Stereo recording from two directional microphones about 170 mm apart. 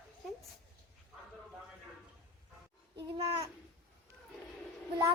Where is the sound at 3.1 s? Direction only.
30° right (ahead or behind).